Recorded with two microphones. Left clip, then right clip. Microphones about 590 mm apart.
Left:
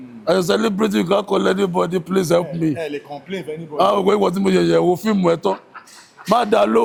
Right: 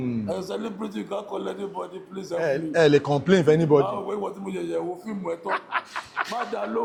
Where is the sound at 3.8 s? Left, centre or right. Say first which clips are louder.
Left 11 dB; left.